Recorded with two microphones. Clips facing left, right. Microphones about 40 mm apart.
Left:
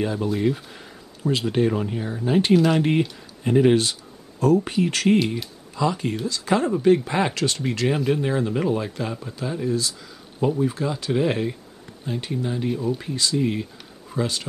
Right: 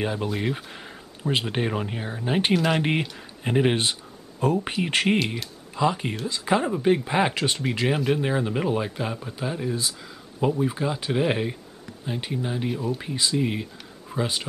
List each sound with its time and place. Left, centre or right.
0.0 s speech: right
2.5 s speech: centre
3.0 s speech: right